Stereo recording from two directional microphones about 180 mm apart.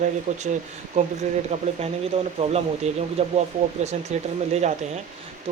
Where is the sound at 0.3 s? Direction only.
35° right (ahead or behind).